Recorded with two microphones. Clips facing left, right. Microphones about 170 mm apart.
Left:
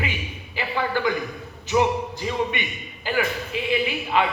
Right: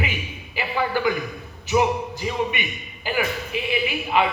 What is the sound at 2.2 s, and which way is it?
Speech, 10° right (ahead or behind).